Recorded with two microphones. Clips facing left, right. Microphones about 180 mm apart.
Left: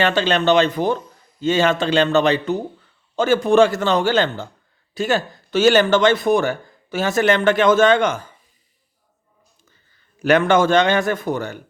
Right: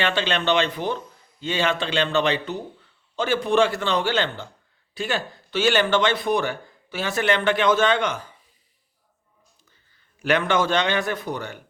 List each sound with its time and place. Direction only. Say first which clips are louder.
0.0 s speech: left 6 dB; 40° left (ahead or behind)
10.2 s speech: left 6 dB; 45° left (ahead or behind)